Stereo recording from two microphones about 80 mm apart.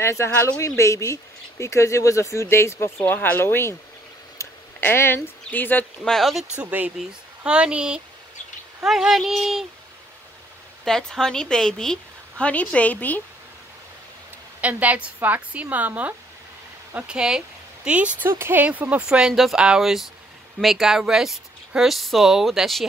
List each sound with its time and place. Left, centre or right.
0.0 s speech: left
4.4 s a sound: left
6.0 s speech: centre
6.6 s speech: right; by 9.7 s centre
10.9 s a woman's voice: centre
14.6 s speech: centre
16.9 s speech: centre